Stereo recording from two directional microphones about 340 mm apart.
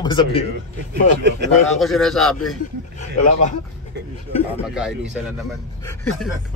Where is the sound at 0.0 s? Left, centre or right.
Centre.